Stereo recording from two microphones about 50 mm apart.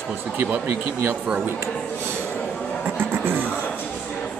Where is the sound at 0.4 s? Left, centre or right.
Right.